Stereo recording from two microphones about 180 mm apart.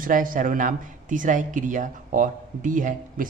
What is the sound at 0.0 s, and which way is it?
Speech, 50° right (ahead or behind).